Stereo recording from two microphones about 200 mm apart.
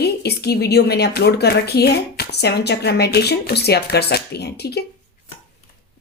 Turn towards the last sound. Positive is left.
turn(degrees=55)  # may be behind; listen again after turning